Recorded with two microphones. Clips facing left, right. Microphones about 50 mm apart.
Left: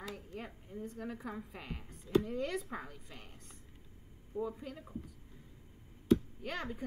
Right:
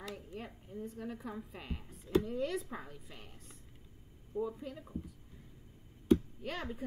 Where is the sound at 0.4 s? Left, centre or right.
Centre.